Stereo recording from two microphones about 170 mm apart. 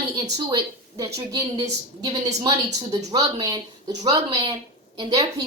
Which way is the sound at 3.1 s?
20° right (ahead or behind).